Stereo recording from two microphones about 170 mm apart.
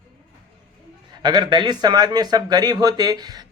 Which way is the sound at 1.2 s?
25° right (ahead or behind).